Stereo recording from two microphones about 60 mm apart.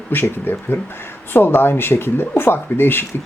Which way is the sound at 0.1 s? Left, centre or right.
Left.